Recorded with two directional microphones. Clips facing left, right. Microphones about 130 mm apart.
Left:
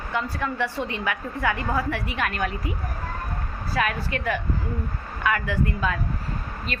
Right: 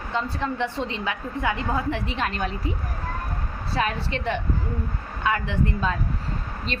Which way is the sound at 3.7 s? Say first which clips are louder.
Even; 25° right (ahead or behind).